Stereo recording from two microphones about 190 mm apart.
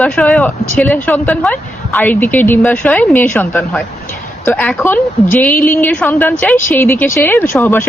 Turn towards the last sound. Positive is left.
turn(degrees=10)  # may be behind; listen again after turning